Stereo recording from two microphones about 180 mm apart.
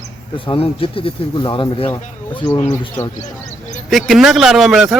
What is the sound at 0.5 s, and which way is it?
Speech, 30° left (ahead or behind).